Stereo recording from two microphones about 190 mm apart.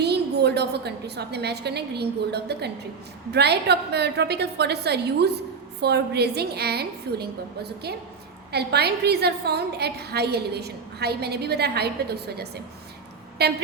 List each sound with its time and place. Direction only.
0.0 s a woman's voice: 60° right (ahead or behind)